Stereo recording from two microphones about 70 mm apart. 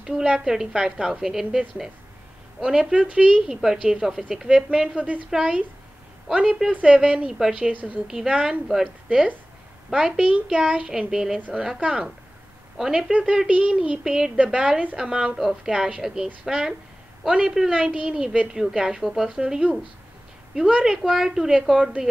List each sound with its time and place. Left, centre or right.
0.0 s a woman's voice: centre
7.7 s a woman's voice: right
8.1 s a woman's voice: centre
9.8 s a woman's voice: centre